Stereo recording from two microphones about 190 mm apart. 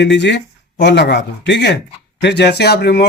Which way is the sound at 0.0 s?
65° left (ahead or behind).